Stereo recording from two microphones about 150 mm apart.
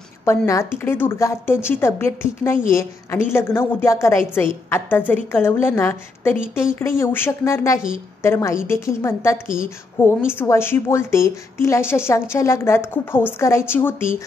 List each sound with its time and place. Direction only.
0.2 s a woman's voice: 20° left (ahead or behind)